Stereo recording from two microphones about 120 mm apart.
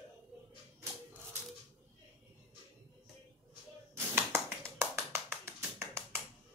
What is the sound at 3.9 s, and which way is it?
Tap, 20° right (ahead or behind).